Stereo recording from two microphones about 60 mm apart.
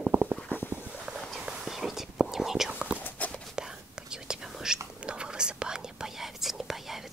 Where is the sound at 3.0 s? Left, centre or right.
Left.